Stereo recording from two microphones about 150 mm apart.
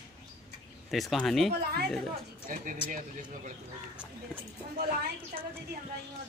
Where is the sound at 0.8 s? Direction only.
Centre (ahead or behind).